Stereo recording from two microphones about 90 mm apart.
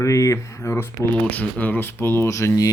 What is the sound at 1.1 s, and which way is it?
Speech, 15° left (ahead or behind).